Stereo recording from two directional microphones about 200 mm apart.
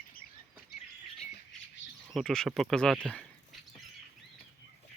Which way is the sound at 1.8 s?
65° left (ahead or behind).